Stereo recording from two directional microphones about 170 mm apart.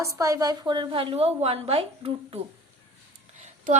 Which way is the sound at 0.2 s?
20° right (ahead or behind).